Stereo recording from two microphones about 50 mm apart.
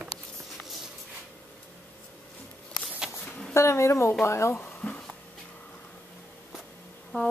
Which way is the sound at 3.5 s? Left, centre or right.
Left.